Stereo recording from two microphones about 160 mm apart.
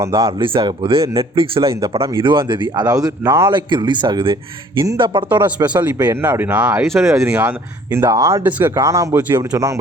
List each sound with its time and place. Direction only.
0.1 s speech: 30° right (ahead or behind)
3.5 s speech: 30° right (ahead or behind)
5.8 s speech: 10° right (ahead or behind)